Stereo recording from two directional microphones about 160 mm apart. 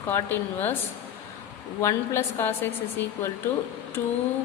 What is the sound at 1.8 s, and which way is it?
Speech, 15° left (ahead or behind).